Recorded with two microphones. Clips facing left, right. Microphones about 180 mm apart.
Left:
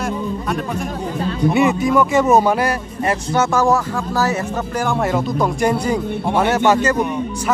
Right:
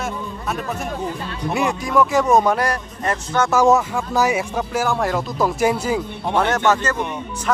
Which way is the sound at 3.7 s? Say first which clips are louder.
Right 1 dB; 15° right (ahead or behind).